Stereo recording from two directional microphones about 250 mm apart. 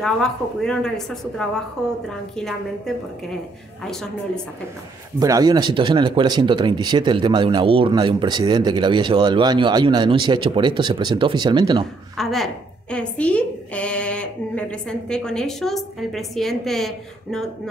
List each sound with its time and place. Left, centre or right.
0.0 s a woman's voice: centre
5.2 s speech: centre
12.2 s a woman's voice: centre